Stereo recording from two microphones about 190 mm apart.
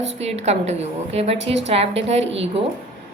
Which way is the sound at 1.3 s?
70° right (ahead or behind).